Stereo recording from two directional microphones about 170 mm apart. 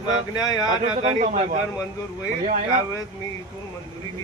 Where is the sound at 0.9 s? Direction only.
40° right (ahead or behind).